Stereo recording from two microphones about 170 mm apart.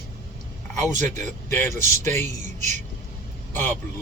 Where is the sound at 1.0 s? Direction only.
45° right (ahead or behind).